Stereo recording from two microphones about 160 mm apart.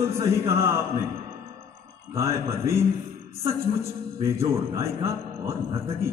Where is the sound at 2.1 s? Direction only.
20° right (ahead or behind).